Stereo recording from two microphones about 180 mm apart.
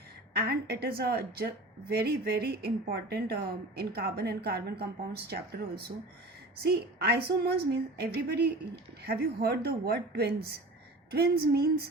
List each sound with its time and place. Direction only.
0.3 s a woman's voice: 60° right (ahead or behind)